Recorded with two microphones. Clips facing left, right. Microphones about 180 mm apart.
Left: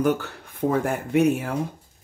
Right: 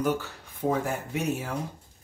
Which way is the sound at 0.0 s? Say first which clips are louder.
Left 5 dB; 60° left (ahead or behind).